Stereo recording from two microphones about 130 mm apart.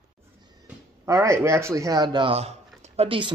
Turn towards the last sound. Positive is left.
turn(degrees=-45)  # may be behind; listen again after turning